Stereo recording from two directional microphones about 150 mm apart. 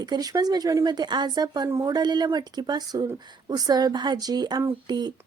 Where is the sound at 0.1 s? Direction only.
25° right (ahead or behind).